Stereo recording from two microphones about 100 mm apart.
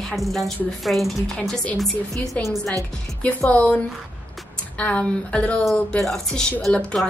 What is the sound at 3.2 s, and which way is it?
A woman's voice, 10° left (ahead or behind).